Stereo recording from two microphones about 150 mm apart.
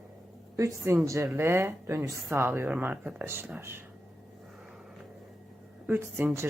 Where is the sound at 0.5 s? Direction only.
20° right (ahead or behind).